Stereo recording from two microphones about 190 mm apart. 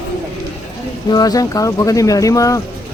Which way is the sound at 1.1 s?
20° left (ahead or behind).